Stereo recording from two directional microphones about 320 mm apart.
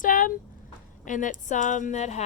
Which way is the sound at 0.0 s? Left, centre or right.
Left.